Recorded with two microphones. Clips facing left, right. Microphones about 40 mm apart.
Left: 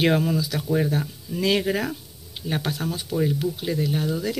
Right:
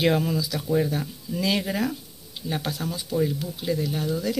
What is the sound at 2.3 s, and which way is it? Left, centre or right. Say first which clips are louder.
Speech: left 2 dB; left.